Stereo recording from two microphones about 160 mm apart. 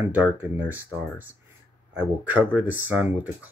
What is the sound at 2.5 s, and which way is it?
Speech, 10° right (ahead or behind).